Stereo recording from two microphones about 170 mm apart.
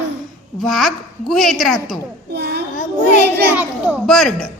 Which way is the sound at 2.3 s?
75° right (ahead or behind).